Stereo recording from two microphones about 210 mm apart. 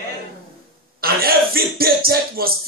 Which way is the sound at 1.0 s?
45° right (ahead or behind).